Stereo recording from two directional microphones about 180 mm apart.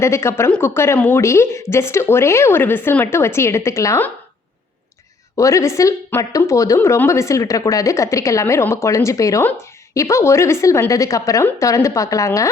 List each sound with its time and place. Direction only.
0.0 s a woman's voice: 15° left (ahead or behind)
5.4 s a woman's voice: 15° left (ahead or behind)